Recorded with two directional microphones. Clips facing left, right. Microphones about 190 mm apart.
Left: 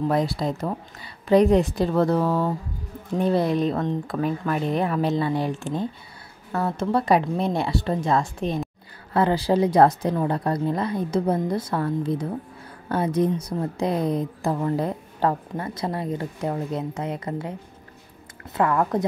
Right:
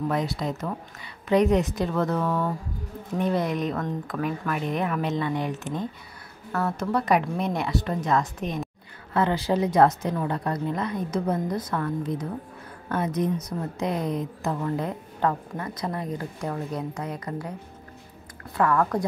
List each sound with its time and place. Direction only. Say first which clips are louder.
0.1 s a woman's voice: left 4 dB; 35° left (ahead or behind)
18.6 s a woman's voice: left 1 dB; 20° left (ahead or behind)